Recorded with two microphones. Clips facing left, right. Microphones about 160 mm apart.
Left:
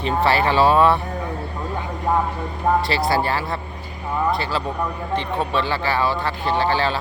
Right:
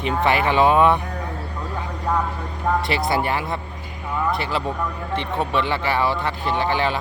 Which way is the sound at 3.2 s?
20° right (ahead or behind).